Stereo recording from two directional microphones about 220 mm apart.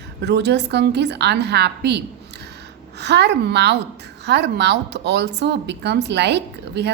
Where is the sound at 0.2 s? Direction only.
50° right (ahead or behind).